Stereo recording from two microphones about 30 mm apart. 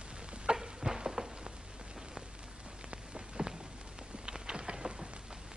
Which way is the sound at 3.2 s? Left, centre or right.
Right.